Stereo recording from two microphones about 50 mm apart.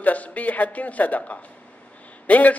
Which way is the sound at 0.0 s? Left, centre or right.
Left.